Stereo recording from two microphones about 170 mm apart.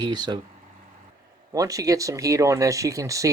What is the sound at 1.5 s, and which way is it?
Speech, 20° right (ahead or behind).